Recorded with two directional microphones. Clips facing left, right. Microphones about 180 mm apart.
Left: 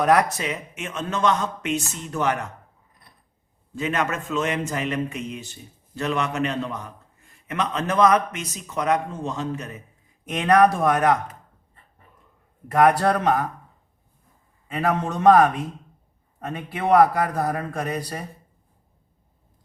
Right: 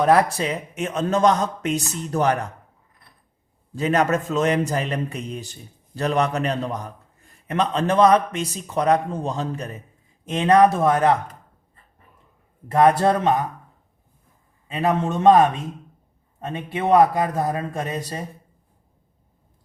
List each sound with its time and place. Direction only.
0.0 s a man's voice: 30° right (ahead or behind)
3.8 s a man's voice: 35° right (ahead or behind)
12.6 s a man's voice: 25° right (ahead or behind)
14.7 s a man's voice: 25° right (ahead or behind)